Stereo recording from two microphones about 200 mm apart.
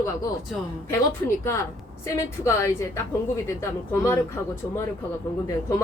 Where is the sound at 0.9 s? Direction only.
15° left (ahead or behind).